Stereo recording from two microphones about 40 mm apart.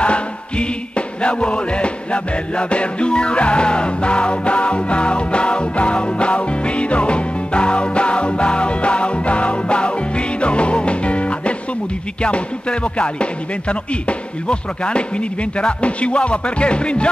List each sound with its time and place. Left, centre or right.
0.0 s music: left